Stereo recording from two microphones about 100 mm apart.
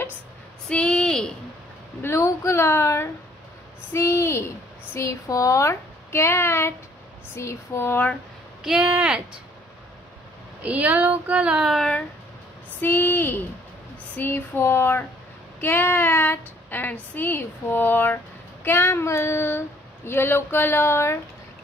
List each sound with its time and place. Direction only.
0.7 s speech: 10° left (ahead or behind)
2.0 s speech: 25° left (ahead or behind)
8.6 s child singing: 10° right (ahead or behind)
10.6 s child singing: 15° right (ahead or behind)
12.8 s speech: 20° left (ahead or behind)